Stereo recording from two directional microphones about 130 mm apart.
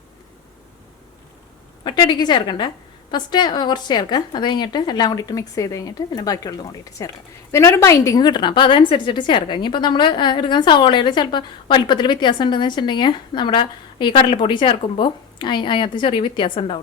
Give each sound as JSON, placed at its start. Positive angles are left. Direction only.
{"t": 1.8, "sound": "a woman's voice", "side_deg": 35}